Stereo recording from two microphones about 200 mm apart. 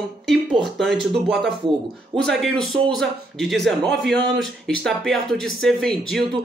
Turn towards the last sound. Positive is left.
turn(degrees=5)  # may be behind; listen again after turning